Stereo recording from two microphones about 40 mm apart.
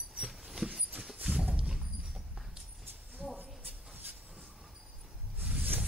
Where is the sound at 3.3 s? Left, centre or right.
Right.